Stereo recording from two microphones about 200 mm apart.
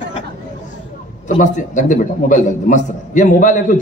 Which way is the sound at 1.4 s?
40° left (ahead or behind).